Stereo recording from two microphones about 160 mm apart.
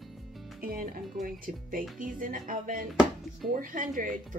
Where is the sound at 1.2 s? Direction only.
60° right (ahead or behind).